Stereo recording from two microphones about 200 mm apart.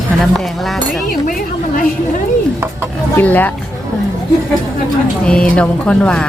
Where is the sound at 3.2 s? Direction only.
10° left (ahead or behind).